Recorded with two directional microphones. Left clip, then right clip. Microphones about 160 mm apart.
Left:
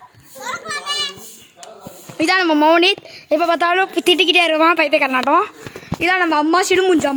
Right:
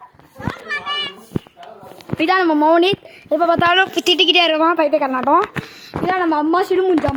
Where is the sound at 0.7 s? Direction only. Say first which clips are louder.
Right 1 dB; 15° left (ahead or behind).